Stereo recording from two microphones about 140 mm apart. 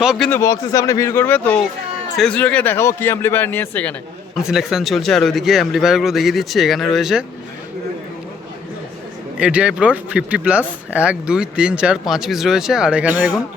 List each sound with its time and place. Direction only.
0.0 s a man's voice: 5° right (ahead or behind)
0.3 s a man's voice: 20° left (ahead or behind)
4.4 s a man's voice: centre (ahead or behind)
9.4 s speech: 10° right (ahead or behind)